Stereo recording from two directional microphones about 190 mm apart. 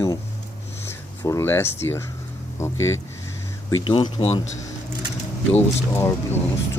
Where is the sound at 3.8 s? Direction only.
25° left (ahead or behind).